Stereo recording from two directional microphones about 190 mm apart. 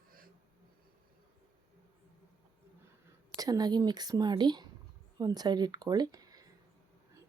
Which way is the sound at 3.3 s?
20° right (ahead or behind).